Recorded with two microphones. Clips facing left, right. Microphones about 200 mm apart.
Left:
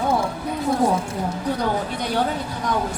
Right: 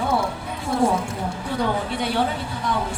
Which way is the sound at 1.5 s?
40° left (ahead or behind).